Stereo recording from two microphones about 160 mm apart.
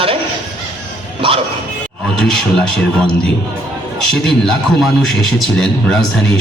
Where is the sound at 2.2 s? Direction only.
5° left (ahead or behind).